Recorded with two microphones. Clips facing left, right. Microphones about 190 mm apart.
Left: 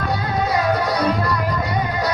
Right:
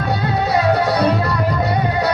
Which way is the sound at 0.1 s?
65° right (ahead or behind).